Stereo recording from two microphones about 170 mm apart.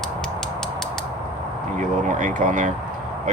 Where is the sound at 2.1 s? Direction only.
50° right (ahead or behind).